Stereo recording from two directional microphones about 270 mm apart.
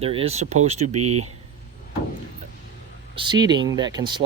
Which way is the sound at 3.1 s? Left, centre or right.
Centre.